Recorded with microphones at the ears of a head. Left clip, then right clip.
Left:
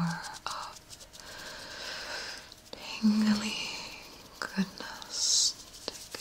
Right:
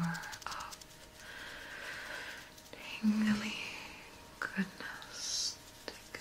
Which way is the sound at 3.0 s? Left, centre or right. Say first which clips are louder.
Left 5 dB; left.